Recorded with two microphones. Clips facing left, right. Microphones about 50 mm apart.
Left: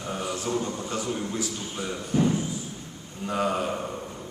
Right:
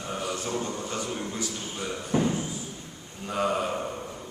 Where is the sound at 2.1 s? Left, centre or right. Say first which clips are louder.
Left 2 dB; right.